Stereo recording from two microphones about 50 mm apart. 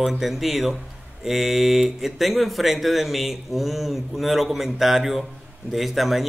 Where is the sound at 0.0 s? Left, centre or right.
Centre.